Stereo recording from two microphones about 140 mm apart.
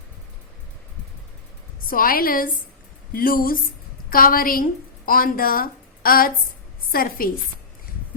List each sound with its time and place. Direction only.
1.9 s a woman's voice: 90° left